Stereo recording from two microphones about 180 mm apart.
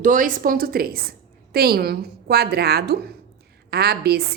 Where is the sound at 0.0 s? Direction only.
50° right (ahead or behind).